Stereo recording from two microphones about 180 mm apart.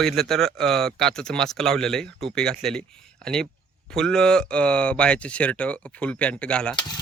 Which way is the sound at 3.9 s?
5° left (ahead or behind).